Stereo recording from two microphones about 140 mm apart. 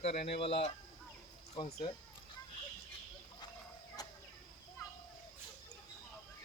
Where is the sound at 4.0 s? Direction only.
30° left (ahead or behind).